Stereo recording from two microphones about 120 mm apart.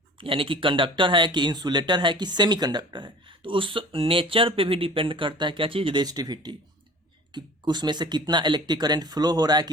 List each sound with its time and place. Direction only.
0.2 s speech: 50° right (ahead or behind)